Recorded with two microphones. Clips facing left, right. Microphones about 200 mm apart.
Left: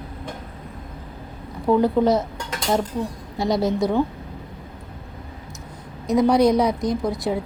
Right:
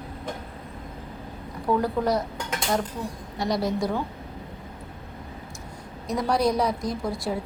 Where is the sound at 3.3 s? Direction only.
25° left (ahead or behind).